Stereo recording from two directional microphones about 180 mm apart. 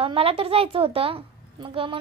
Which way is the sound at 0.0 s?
30° right (ahead or behind).